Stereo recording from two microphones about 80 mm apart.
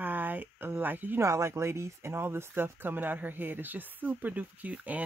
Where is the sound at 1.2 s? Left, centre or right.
Right; by 5.0 s centre.